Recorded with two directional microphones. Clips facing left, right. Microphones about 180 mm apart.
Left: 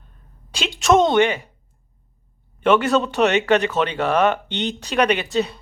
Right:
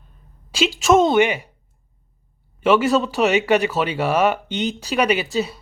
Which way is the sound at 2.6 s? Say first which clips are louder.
Even; centre (ahead or behind).